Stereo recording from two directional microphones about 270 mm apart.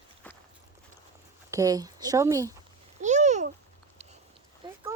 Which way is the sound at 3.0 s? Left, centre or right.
Right.